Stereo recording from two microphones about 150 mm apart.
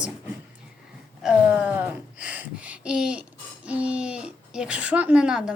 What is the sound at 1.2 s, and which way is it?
Speech, 10° right (ahead or behind).